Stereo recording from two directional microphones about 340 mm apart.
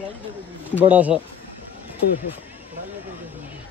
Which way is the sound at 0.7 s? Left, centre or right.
Centre.